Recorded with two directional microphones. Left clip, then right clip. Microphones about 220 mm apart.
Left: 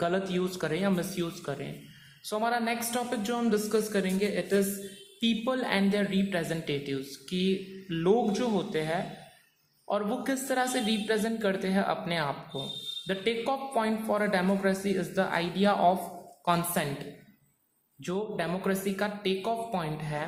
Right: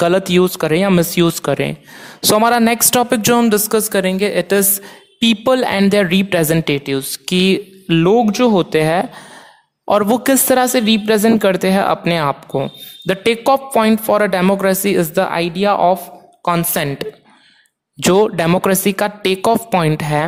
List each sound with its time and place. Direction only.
0.0 s a woman's voice: 45° right (ahead or behind)